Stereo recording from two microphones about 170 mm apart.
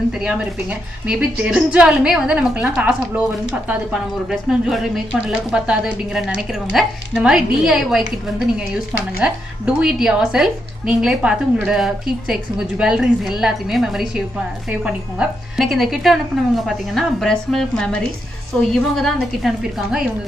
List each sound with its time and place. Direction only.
0.2 s a woman's voice: 5° right (ahead or behind)
4.3 s speech: 5° right (ahead or behind)
9.2 s speech: 5° right (ahead or behind)